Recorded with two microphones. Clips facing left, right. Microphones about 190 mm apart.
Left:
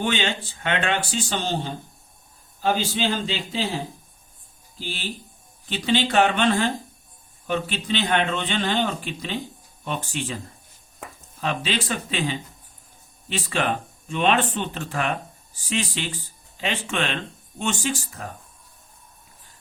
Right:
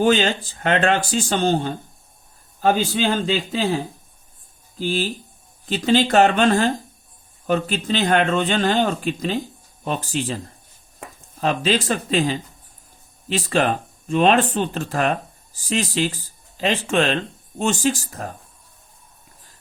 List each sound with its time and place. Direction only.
0.0 s a man's voice: 40° right (ahead or behind)
4.8 s a man's voice: 45° right (ahead or behind)
11.3 s speech: 40° right (ahead or behind)